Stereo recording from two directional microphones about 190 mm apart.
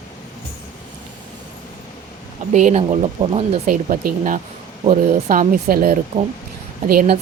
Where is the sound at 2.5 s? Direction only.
35° right (ahead or behind).